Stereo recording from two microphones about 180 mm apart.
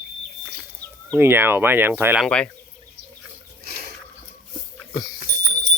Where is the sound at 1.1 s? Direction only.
10° right (ahead or behind).